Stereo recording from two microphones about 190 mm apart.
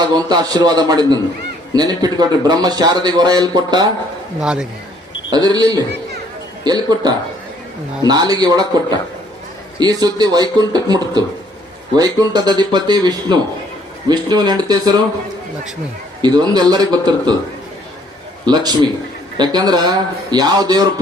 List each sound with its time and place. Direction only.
0.0 s speech: 20° right (ahead or behind)
4.4 s speech: 5° right (ahead or behind)
5.3 s speech: 20° right (ahead or behind)
16.2 s speech: 20° right (ahead or behind)
18.4 s speech: 20° right (ahead or behind)